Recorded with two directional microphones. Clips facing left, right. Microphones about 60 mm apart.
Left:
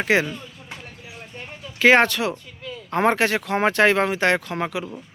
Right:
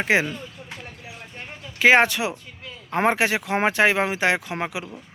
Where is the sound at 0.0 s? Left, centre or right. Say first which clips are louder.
Left 1 dB; centre.